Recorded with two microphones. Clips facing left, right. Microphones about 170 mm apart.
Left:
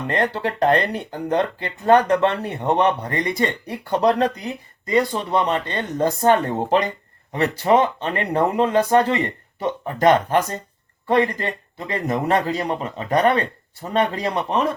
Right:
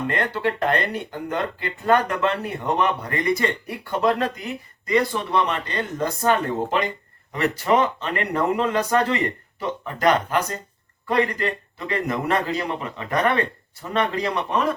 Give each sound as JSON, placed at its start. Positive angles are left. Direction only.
{"t": 0.3, "sound": "a man's voice", "side_deg": 30}